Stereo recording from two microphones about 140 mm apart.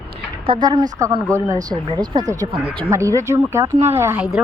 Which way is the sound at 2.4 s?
35° right (ahead or behind).